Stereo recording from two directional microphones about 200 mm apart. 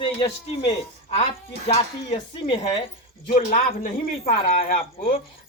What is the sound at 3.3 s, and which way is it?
Speech, 40° left (ahead or behind).